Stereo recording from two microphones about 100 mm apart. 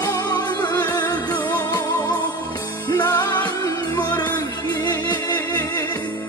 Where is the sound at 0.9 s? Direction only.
40° left (ahead or behind).